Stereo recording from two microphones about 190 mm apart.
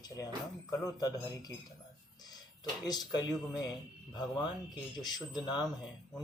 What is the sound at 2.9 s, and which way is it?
Speech, 20° left (ahead or behind).